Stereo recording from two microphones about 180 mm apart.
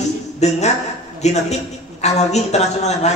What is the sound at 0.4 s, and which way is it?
A woman's voice, 40° left (ahead or behind).